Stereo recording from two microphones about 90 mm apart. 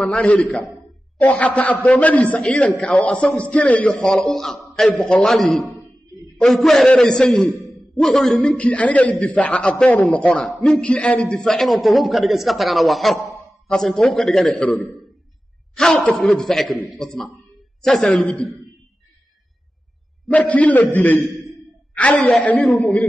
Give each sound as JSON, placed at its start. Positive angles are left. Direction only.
{"t": 0.0, "sound": "a man's voice", "side_deg": 15}
{"t": 8.5, "sound": "a man's voice", "side_deg": 15}
{"t": 20.2, "sound": "a man's voice", "side_deg": 15}
{"t": 22.1, "sound": "a man's voice", "side_deg": 5}
{"t": 22.4, "sound": "a man's voice", "side_deg": 15}